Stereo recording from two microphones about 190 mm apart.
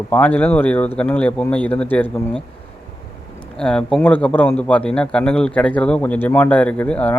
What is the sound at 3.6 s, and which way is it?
A man's voice, 5° left (ahead or behind).